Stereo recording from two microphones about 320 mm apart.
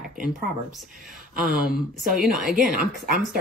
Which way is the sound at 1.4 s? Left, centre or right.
Centre.